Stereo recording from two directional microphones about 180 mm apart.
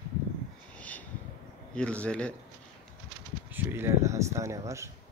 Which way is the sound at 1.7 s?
5° left (ahead or behind).